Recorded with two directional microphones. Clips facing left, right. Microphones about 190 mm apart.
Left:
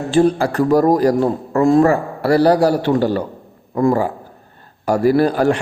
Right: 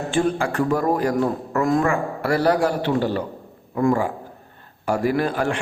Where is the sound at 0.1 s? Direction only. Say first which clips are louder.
Left 8 dB; 35° left (ahead or behind).